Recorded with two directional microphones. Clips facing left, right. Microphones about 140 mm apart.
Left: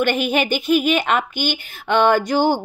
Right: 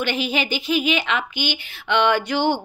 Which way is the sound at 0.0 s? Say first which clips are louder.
Left 5 dB; 50° left (ahead or behind).